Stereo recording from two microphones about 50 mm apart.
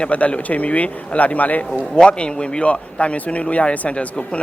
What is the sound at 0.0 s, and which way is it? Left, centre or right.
Speech, left.